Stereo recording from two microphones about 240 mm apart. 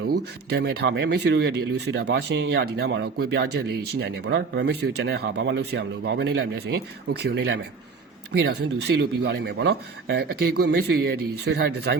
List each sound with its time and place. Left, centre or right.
0.5 s speech: right